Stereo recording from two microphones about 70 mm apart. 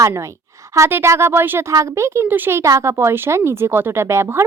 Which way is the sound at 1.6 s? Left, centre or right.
Right.